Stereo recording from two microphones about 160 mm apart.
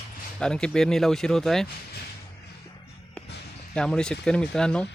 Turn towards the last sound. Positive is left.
turn(degrees=5)  # may be behind; listen again after turning